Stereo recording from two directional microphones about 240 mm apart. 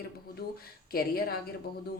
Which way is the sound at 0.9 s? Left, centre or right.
Left.